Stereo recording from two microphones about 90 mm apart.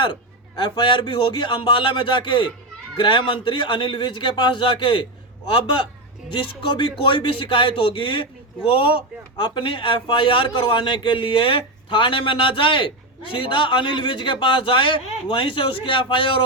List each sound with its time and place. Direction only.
0.6 s a man's voice: 60° left (ahead or behind)